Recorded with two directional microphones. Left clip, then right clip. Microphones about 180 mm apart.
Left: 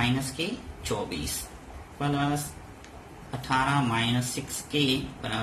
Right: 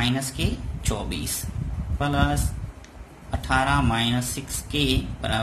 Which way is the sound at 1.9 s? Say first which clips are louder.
Right 4 dB; 40° right (ahead or behind).